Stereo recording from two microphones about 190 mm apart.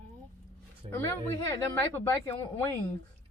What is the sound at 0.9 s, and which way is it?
Speech, 15° left (ahead or behind).